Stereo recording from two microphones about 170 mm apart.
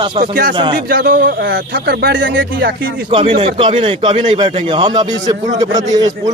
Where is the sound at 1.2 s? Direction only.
90° right.